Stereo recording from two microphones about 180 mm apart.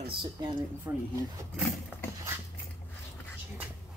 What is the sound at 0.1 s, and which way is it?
Speech, 30° right (ahead or behind).